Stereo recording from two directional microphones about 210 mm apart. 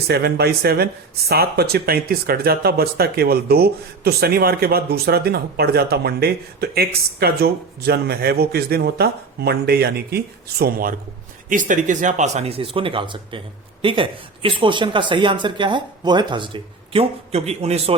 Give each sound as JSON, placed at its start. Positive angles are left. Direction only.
{"t": 0.1, "sound": "speech", "side_deg": -50}